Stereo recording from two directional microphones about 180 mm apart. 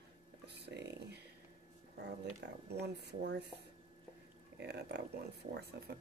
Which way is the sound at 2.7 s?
65° right (ahead or behind).